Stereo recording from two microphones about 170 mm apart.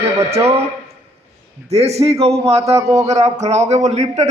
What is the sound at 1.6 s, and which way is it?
Speech, 40° right (ahead or behind).